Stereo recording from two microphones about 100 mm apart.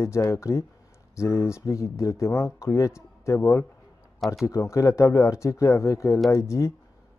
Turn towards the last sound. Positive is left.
turn(degrees=30)  # may be behind; listen again after turning